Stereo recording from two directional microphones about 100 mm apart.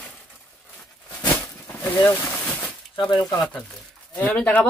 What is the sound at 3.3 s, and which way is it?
Speech, centre (ahead or behind).